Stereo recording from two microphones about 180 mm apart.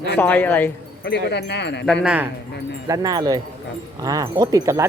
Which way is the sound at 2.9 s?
20° right (ahead or behind).